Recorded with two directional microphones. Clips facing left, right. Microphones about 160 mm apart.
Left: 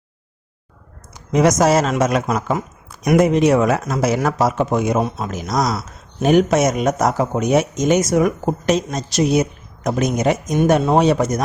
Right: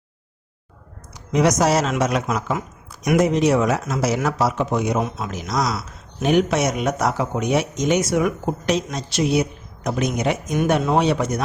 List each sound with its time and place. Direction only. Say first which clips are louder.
1.1 s speech: left 3 dB; 50° left (ahead or behind)
3.2 s speech: left 3 dB; 55° left (ahead or behind)
4.9 s a man's voice: left 3 dB; 35° left (ahead or behind)
5.3 s a man's voice: left 3 dB; 45° left (ahead or behind)